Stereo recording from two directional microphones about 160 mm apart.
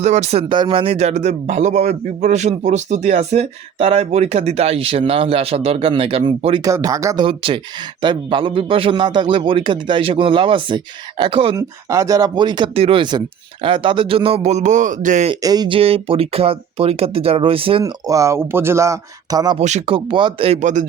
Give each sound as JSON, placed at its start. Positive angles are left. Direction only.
{"t": 0.0, "sound": "speech", "side_deg": -45}
{"t": 6.7, "sound": "speech", "side_deg": -20}
{"t": 7.3, "sound": "speech", "side_deg": -35}
{"t": 11.5, "sound": "speech", "side_deg": -20}
{"t": 15.4, "sound": "speech", "side_deg": -25}
{"t": 18.0, "sound": "speech", "side_deg": -20}
{"t": 19.5, "sound": "speech", "side_deg": -45}